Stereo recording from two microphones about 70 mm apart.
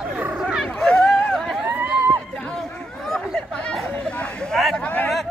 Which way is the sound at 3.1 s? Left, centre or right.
Centre.